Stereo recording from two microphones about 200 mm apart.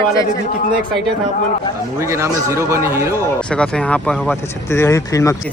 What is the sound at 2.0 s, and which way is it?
Speech, 15° right (ahead or behind).